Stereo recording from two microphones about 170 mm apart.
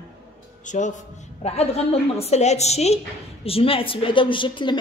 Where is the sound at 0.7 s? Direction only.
45° left (ahead or behind).